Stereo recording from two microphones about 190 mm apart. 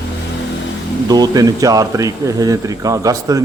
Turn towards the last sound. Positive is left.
turn(degrees=-20)  # may be behind; listen again after turning